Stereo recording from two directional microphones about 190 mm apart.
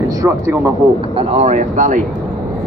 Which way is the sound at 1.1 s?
35° right (ahead or behind).